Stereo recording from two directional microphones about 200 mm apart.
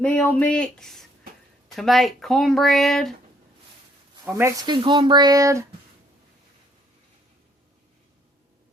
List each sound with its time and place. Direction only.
0.0 s speech: 5° left (ahead or behind)
4.1 s speech: 15° right (ahead or behind)